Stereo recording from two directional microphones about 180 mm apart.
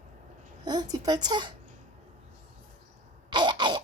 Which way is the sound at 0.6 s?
20° right (ahead or behind).